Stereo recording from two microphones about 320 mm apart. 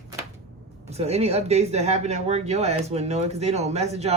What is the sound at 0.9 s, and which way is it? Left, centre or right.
Speech, centre.